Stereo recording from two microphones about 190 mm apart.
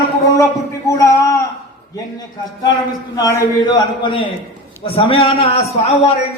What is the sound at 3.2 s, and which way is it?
A man's voice, 15° left (ahead or behind).